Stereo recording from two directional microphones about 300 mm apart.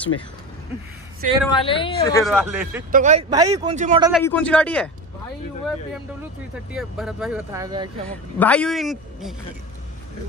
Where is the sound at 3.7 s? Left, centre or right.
Right.